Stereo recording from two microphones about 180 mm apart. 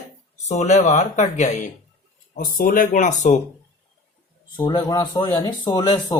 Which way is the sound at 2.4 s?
55° left (ahead or behind).